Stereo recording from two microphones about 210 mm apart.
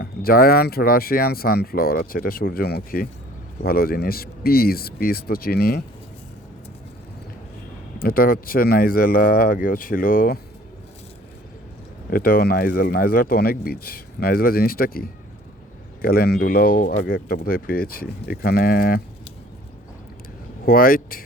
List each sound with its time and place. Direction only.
0.0 s speech: 45° left (ahead or behind)
7.9 s speech: 45° left (ahead or behind)
12.1 s speech: 45° left (ahead or behind)
20.7 s speech: 45° left (ahead or behind)